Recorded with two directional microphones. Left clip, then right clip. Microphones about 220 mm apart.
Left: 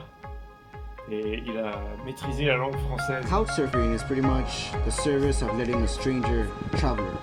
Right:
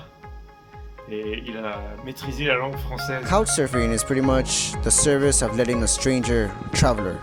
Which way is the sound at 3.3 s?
50° right (ahead or behind).